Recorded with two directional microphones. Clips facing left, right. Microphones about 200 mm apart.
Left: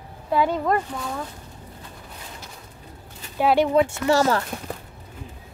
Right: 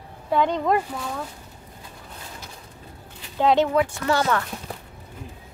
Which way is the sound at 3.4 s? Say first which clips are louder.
Even; 10° left (ahead or behind).